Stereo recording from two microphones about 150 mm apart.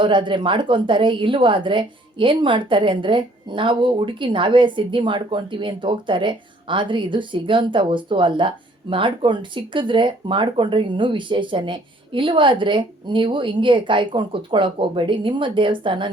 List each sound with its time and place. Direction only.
0.0 s a woman's voice: 30° right (ahead or behind)